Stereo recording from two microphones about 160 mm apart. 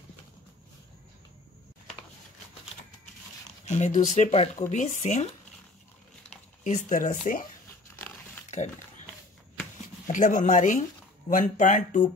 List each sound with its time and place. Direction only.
3.6 s speech: 45° left (ahead or behind)
6.3 s speech: 50° left (ahead or behind)
10.0 s speech: 50° left (ahead or behind)